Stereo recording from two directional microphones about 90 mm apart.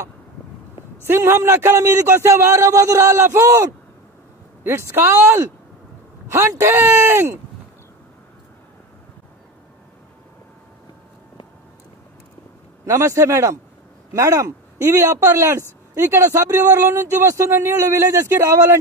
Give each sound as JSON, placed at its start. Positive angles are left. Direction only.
{"t": 1.0, "sound": "speech", "side_deg": -25}
{"t": 4.6, "sound": "a man's voice", "side_deg": -25}
{"t": 12.8, "sound": "speech", "side_deg": -35}